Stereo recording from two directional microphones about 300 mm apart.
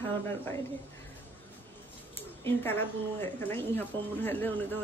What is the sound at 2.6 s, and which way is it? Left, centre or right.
Speech, centre.